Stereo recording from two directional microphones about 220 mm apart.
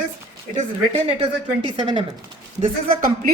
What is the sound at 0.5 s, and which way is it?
Speech, 25° right (ahead or behind).